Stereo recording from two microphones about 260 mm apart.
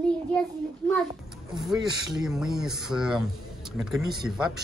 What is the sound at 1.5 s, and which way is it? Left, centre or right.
Speech, centre.